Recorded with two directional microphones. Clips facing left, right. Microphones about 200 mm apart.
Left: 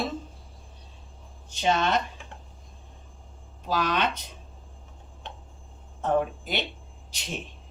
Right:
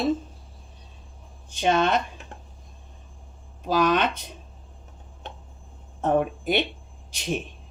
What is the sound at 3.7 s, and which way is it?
Speech, 50° right (ahead or behind).